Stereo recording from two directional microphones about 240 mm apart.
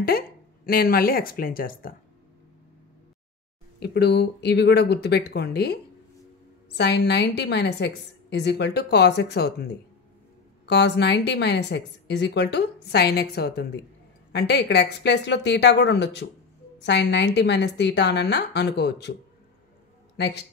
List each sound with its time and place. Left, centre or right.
0.7 s speech: left
3.8 s a woman's voice: left
6.8 s a woman's voice: left
10.7 s a woman's voice: left
20.2 s a man's voice: left